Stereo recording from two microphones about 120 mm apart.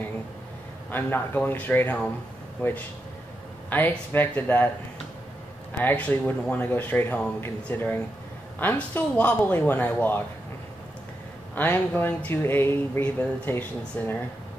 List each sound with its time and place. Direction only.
0.8 s speech: 15° left (ahead or behind)
5.8 s speech: 15° left (ahead or behind)
11.5 s speech: 15° left (ahead or behind)